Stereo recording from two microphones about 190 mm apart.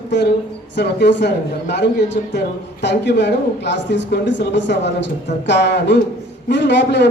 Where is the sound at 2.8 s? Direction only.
65° left (ahead or behind).